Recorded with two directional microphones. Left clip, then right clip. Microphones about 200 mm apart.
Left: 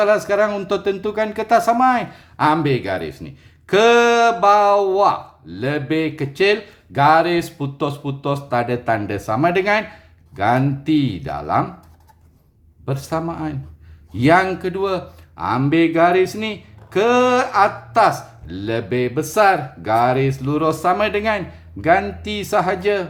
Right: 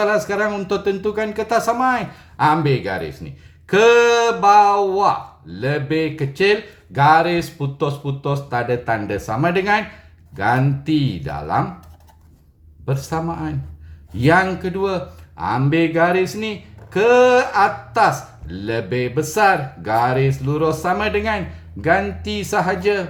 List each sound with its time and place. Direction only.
0.0 s speech: 25° left (ahead or behind)
12.8 s speech: 25° left (ahead or behind)